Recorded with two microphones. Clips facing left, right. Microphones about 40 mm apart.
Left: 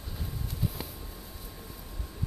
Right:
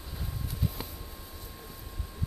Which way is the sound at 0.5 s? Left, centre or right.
Centre.